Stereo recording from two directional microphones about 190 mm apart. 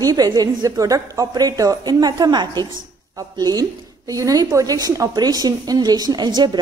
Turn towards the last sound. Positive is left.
turn(degrees=-20)  # may be behind; listen again after turning